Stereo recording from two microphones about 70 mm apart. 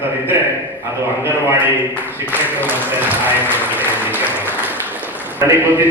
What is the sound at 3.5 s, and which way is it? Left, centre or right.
Applause, right.